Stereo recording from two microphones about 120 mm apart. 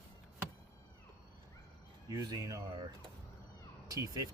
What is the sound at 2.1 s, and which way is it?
Speech, 35° right (ahead or behind).